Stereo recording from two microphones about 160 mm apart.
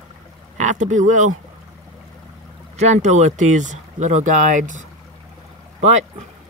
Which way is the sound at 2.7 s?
45° right (ahead or behind).